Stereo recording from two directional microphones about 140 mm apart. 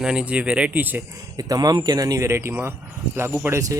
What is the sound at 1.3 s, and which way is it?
Speech, 25° right (ahead or behind).